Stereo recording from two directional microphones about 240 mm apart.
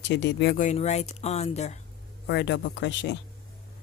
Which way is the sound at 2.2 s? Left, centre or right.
Left.